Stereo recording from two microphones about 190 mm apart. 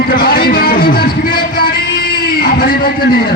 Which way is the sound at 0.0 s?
50° left (ahead or behind).